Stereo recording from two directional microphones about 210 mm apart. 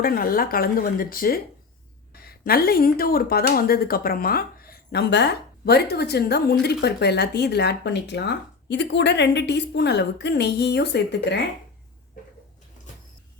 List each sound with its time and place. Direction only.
0.0 s speech: 45° left (ahead or behind)